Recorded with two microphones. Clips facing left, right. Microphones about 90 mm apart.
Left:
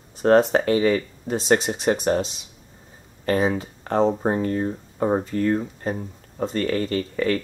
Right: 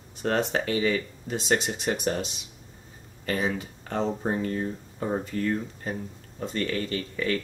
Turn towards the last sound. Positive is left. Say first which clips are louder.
# left 6 dB
turn(degrees=35)  # may be behind; listen again after turning